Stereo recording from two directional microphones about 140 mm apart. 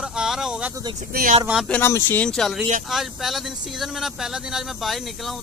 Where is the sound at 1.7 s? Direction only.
15° left (ahead or behind).